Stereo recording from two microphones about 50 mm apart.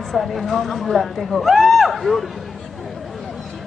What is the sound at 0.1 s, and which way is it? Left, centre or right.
A woman's voice, centre.